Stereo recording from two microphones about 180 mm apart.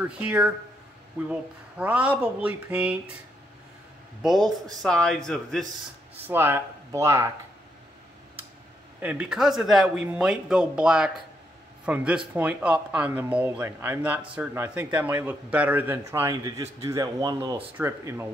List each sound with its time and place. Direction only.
0.0 s speech: 5° right (ahead or behind)
4.2 s a man's voice: centre (ahead or behind)
6.1 s speech: 10° right (ahead or behind)
9.0 s a man's voice: 5° right (ahead or behind)